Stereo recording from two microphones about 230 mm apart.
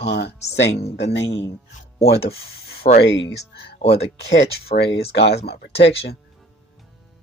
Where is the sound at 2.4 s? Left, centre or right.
Left.